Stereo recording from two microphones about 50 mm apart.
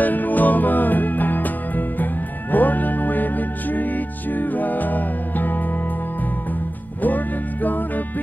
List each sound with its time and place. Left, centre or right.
0.0 s music: left
7.0 s music: left